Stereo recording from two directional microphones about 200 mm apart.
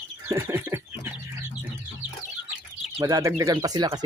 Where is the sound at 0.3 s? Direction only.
10° right (ahead or behind).